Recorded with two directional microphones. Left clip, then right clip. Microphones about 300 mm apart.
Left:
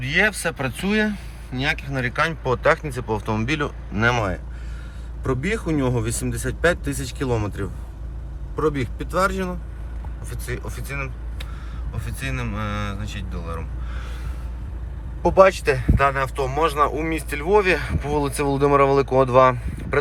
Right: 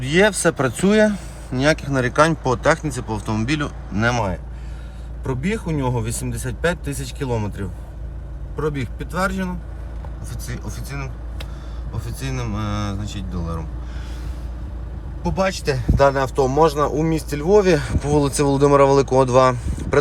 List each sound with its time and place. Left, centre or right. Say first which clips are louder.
0.0 s speech: right 4 dB; centre
10.7 s speech: left 2 dB; centre
15.2 s speech: left 7 dB; centre